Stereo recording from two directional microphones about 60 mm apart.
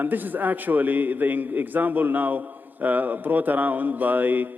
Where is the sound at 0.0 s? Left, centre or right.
Right.